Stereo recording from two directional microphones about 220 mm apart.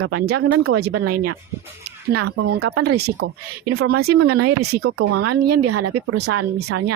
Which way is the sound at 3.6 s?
90° right.